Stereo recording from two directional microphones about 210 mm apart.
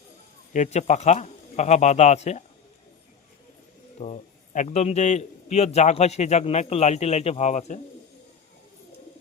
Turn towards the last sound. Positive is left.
turn(degrees=35)  # may be behind; listen again after turning